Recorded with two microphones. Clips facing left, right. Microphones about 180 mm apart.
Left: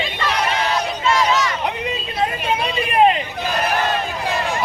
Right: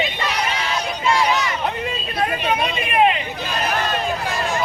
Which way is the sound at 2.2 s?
30° left (ahead or behind).